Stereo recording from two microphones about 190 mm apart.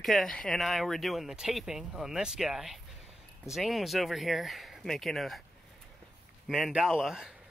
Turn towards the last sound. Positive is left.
turn(degrees=-5)  # may be behind; listen again after turning